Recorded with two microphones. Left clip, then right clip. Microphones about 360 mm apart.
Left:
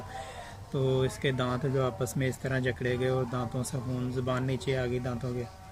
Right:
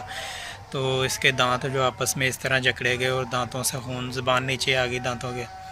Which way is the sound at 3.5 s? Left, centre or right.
Right.